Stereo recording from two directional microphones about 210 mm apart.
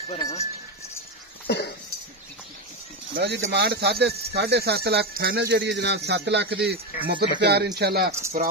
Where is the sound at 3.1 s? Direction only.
55° right (ahead or behind).